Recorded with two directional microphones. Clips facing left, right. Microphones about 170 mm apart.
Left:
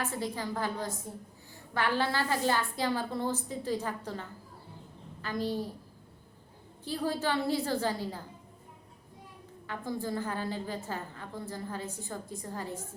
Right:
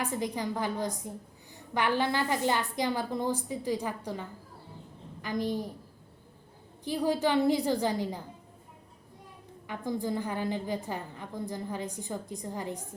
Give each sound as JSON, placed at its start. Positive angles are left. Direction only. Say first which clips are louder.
{"t": 0.0, "sound": "a woman's voice", "louder": "right 2 dB", "side_deg": -15}
{"t": 6.8, "sound": "a woman's voice", "louder": "right 4 dB", "side_deg": -15}
{"t": 9.6, "sound": "a woman's voice", "louder": "right 3 dB", "side_deg": -15}